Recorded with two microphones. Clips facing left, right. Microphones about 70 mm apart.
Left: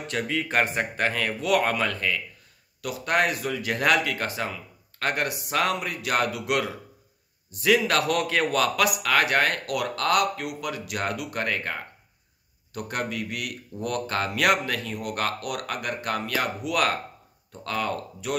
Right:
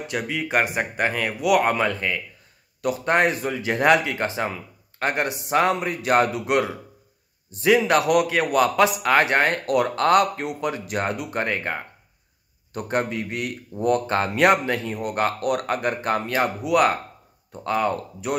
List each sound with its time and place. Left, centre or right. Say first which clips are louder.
0.0 s speech: right 1 dB; centre